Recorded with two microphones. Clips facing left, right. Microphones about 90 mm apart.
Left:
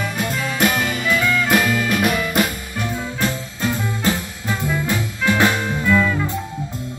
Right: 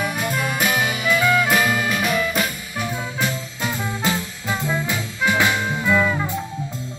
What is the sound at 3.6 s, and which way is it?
Music, 15° right (ahead or behind).